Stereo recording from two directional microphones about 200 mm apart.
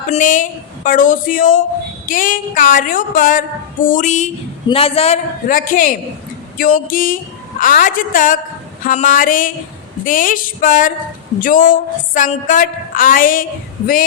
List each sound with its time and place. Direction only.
0.1 s a woman's voice: 40° left (ahead or behind)